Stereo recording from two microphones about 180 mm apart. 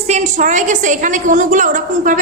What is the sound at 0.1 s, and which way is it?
A woman's voice, 45° right (ahead or behind).